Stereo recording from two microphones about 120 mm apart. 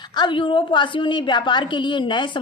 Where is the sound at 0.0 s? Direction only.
40° left (ahead or behind).